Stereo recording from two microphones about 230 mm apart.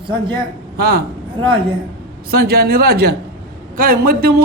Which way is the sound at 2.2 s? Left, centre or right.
Right.